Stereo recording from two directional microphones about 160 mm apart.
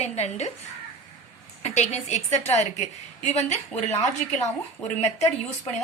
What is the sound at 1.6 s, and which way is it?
A woman's voice, 45° left (ahead or behind).